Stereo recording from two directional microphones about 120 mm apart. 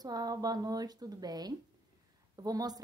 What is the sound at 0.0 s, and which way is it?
A woman's voice, 30° right (ahead or behind).